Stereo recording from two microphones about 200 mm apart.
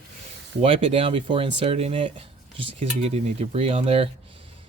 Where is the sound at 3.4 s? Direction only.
30° right (ahead or behind).